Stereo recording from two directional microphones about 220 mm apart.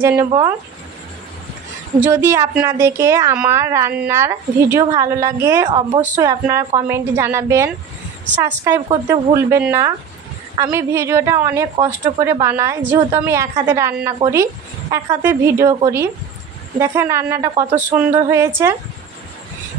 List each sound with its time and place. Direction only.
0.0 s a woman's voice: 10° right (ahead or behind)
2.0 s a woman's voice: 10° right (ahead or behind)